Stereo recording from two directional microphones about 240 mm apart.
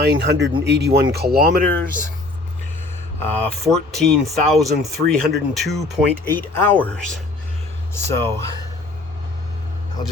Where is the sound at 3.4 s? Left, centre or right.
Centre.